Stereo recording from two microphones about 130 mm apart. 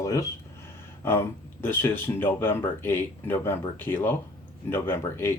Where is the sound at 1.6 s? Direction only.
15° left (ahead or behind).